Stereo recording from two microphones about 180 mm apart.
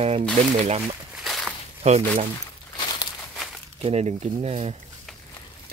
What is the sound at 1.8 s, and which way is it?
Speech, 35° right (ahead or behind).